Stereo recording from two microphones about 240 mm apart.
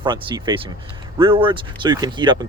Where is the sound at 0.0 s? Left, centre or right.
Centre.